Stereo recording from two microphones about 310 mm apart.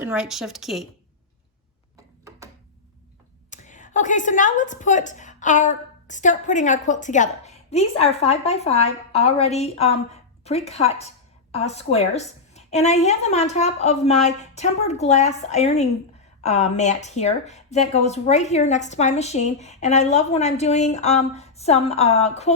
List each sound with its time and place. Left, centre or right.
0.0 s a woman's voice: centre
3.5 s a woman's voice: left